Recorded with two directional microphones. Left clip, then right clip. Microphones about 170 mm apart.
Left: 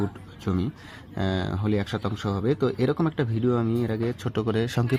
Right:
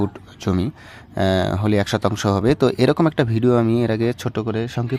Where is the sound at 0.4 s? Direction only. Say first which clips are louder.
Right 6 dB; 35° right (ahead or behind).